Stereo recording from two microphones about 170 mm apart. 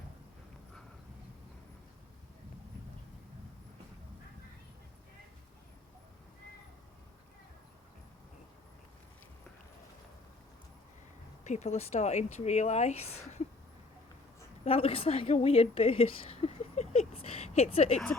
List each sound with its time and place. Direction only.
11.4 s speech: 40° left (ahead or behind)
14.6 s a woman's voice: 35° left (ahead or behind)